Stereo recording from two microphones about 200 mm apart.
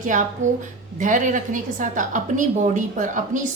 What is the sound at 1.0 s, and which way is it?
Speech, 40° right (ahead or behind).